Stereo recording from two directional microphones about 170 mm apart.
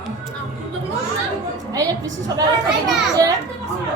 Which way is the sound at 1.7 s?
20° right (ahead or behind).